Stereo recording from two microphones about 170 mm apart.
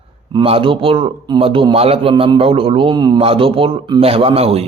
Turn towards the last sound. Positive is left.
turn(degrees=-35)  # may be behind; listen again after turning